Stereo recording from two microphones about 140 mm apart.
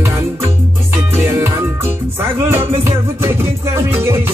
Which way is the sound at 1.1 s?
20° right (ahead or behind).